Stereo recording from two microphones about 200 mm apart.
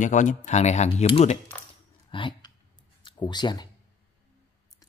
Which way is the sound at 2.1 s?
25° left (ahead or behind).